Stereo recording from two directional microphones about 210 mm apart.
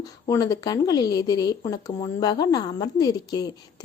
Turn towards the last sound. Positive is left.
turn(degrees=15)  # may be behind; listen again after turning